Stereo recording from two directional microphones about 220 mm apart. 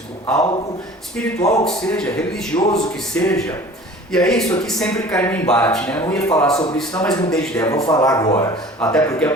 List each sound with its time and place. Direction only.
1.1 s speech: 15° left (ahead or behind)
1.6 s a man's voice: 5° left (ahead or behind)
7.7 s speech: 15° left (ahead or behind)
8.8 s speech: 5° left (ahead or behind)